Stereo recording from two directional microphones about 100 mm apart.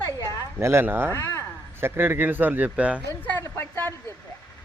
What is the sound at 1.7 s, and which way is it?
Speech, 25° right (ahead or behind).